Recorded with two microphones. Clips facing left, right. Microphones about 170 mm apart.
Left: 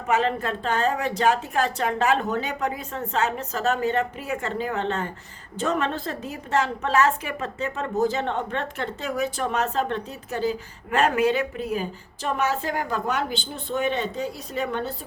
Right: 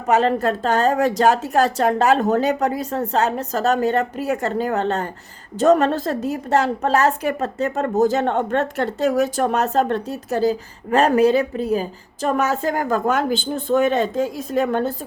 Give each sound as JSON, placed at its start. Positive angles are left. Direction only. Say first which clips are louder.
{"t": 0.1, "sound": "a woman's voice", "louder": "right 6 dB", "side_deg": -40}